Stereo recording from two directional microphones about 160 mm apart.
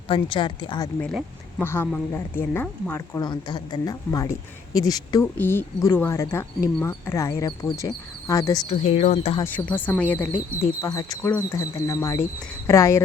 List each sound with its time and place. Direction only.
0.1 s speech: 30° left (ahead or behind)
1.5 s speech: 15° left (ahead or behind)
3.2 s speech: 25° left (ahead or behind)
5.2 s speech: 15° left (ahead or behind)
8.7 s speech: 40° left (ahead or behind)
9.4 s speech: 10° left (ahead or behind)